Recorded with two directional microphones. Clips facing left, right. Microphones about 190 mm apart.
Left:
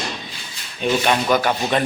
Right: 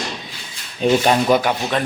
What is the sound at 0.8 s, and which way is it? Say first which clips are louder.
Speech: right 4 dB; 30° right (ahead or behind).